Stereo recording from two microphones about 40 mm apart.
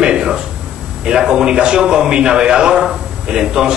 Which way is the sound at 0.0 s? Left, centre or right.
Right.